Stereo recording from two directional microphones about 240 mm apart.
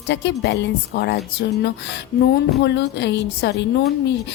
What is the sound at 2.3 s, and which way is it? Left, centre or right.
A woman's voice, left.